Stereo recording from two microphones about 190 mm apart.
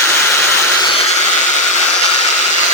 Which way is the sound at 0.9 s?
40° left (ahead or behind).